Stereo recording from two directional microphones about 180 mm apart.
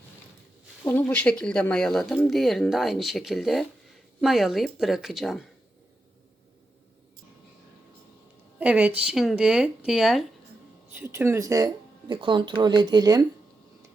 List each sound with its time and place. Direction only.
0.9 s speech: 10° left (ahead or behind)
8.5 s a woman's voice: 5° right (ahead or behind)
10.9 s speech: 15° right (ahead or behind)